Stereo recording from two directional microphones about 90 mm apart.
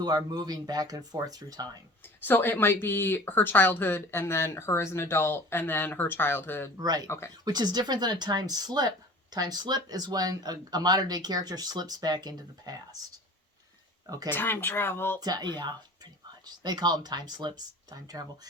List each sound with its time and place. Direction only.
0.3 s speech: 50° right (ahead or behind)
2.2 s speech: 25° left (ahead or behind)
6.7 s speech: 45° right (ahead or behind)
14.3 s speech: 25° left (ahead or behind)
15.2 s speech: 50° right (ahead or behind)